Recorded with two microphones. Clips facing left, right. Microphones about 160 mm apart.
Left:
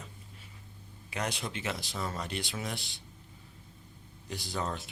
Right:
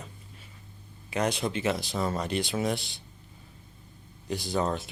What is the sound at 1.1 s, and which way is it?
Speech, 30° right (ahead or behind).